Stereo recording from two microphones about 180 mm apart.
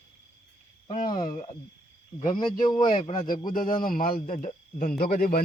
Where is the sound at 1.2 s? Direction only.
45° left (ahead or behind).